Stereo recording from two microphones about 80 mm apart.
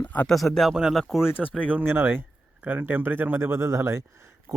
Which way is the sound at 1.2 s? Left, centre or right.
Left.